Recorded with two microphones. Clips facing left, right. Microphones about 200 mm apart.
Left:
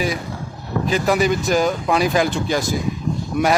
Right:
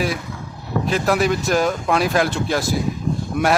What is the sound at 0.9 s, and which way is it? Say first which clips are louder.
Speech: left 1 dB; centre (ahead or behind).